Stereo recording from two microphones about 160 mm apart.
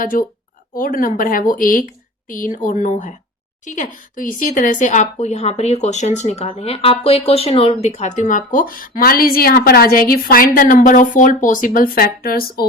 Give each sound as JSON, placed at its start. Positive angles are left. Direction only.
{"t": 0.0, "sound": "a woman's voice", "side_deg": 60}